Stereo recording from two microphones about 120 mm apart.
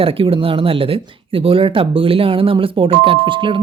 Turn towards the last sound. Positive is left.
turn(degrees=-45)  # may be behind; listen again after turning